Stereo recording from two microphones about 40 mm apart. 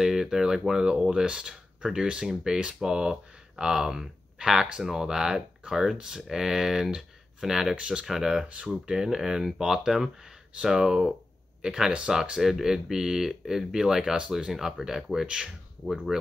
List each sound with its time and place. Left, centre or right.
0.0 s speech: centre
12.4 s speech: centre